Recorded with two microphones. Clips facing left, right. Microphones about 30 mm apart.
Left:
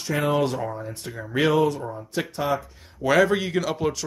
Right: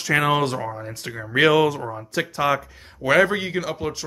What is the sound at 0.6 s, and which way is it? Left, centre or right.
Speech, centre.